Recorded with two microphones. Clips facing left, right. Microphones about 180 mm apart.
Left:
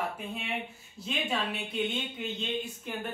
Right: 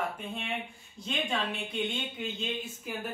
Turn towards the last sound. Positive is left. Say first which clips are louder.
# left 1 dB
turn(degrees=0)  # may be behind; listen again after turning